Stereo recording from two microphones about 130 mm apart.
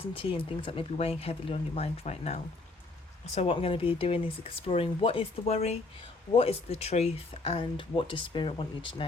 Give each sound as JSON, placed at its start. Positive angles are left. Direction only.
{"t": 0.0, "sound": "speech", "side_deg": 45}
{"t": 7.8, "sound": "speech", "side_deg": 40}